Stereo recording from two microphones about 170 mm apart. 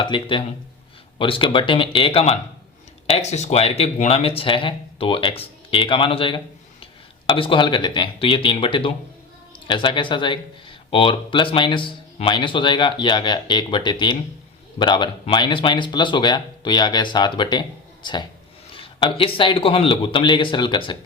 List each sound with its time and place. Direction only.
0.0 s speech: 30° left (ahead or behind)